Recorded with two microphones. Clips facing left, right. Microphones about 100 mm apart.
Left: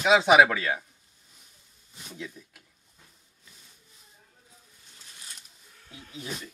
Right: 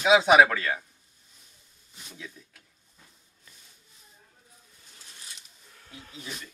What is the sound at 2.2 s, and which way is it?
Speech, 10° left (ahead or behind).